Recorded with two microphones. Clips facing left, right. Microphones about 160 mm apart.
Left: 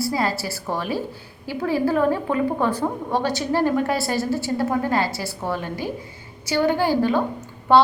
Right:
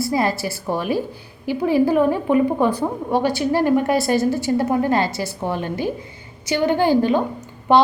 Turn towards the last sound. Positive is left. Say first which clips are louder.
# right 1 dB
turn(degrees=-20)  # may be behind; listen again after turning